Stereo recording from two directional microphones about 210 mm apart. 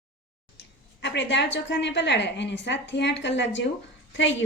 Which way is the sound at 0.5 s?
55° left (ahead or behind).